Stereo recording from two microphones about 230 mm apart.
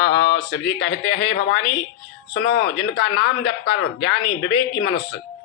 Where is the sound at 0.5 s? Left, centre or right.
Left.